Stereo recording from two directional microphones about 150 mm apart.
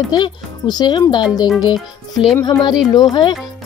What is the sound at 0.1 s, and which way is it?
Speech, 30° left (ahead or behind).